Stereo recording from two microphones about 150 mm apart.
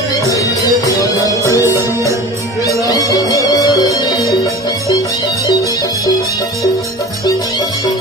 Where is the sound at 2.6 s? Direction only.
25° left (ahead or behind).